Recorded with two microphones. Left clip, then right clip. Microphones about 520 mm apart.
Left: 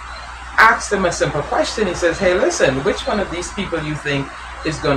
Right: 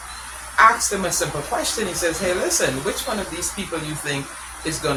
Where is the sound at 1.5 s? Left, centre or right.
Right.